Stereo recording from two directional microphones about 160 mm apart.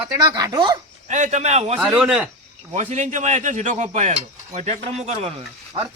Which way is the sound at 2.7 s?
50° right (ahead or behind).